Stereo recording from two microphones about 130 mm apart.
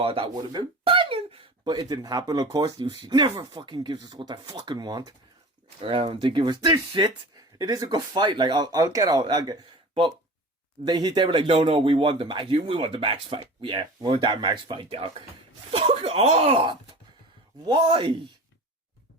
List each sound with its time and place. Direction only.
0.0 s speech: 40° right (ahead or behind)
5.8 s speech: 50° right (ahead or behind); by 9.6 s 30° right (ahead or behind)
10.8 s speech: 35° right (ahead or behind)